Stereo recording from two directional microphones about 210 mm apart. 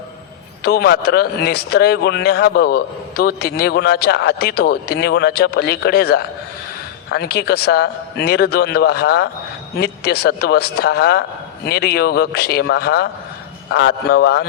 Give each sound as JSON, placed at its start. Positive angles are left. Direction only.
{"t": 0.6, "sound": "a man's voice", "side_deg": 50}